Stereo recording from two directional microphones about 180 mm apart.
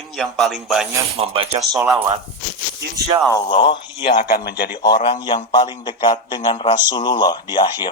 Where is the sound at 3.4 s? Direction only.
25° left (ahead or behind).